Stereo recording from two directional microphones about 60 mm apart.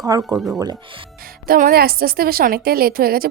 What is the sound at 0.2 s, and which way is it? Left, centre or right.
Speech, centre.